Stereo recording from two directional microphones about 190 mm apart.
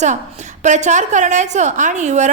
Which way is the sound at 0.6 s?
40° right (ahead or behind).